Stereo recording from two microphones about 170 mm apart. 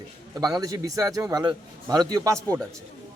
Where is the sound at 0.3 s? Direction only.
20° right (ahead or behind).